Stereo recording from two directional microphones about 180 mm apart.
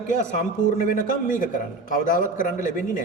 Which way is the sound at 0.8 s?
50° left (ahead or behind).